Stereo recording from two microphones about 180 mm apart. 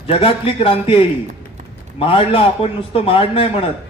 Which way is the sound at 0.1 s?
30° left (ahead or behind).